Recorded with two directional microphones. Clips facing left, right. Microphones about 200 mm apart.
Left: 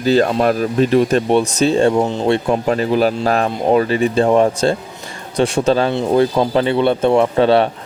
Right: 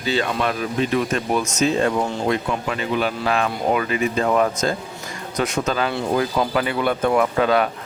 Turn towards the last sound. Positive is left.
turn(degrees=30)  # may be behind; listen again after turning